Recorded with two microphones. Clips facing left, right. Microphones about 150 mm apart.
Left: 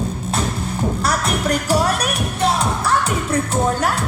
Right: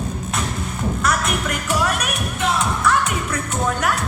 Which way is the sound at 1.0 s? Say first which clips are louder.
Left 1 dB; 35° left (ahead or behind).